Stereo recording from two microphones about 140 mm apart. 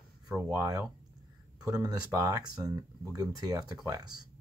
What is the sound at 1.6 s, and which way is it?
Speech, 25° right (ahead or behind).